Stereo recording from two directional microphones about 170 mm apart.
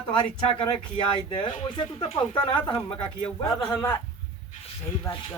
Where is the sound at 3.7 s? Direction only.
15° left (ahead or behind).